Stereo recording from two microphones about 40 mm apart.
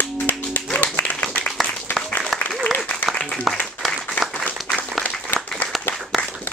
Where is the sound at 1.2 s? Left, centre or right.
Left.